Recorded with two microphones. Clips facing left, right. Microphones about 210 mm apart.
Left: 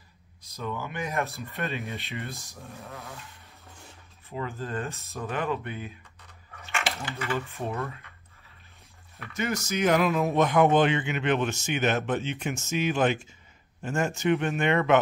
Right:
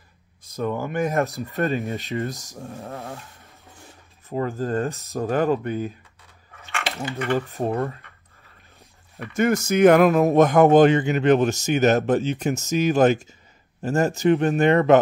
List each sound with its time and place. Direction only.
0.4 s speech: 50° right (ahead or behind)
4.3 s speech: 45° right (ahead or behind)
7.3 s speech: 45° right (ahead or behind)
9.3 s speech: 50° right (ahead or behind)